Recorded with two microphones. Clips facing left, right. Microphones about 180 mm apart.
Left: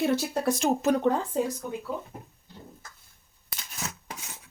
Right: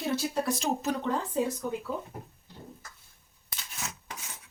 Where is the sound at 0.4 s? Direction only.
55° left (ahead or behind).